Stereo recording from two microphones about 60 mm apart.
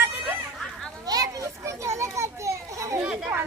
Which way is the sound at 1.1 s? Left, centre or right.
Right.